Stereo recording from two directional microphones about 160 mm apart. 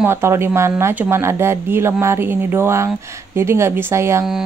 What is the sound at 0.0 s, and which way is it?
Speech, 15° right (ahead or behind).